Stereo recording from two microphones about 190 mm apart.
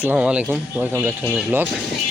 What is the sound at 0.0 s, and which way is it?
Speech, 10° right (ahead or behind).